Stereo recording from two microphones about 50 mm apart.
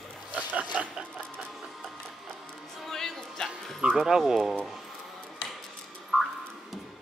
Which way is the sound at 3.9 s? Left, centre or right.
Centre.